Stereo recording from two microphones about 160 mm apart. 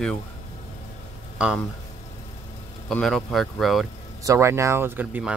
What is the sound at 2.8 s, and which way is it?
Speech, 5° left (ahead or behind).